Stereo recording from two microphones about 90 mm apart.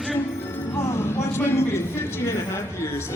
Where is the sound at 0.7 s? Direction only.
30° left (ahead or behind).